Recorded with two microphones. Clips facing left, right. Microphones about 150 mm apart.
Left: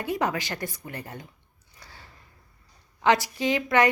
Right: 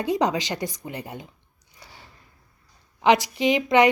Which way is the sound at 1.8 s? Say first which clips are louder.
Right 2 dB; 15° right (ahead or behind).